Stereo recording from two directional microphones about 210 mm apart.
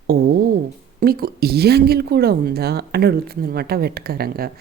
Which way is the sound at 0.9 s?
45° right (ahead or behind).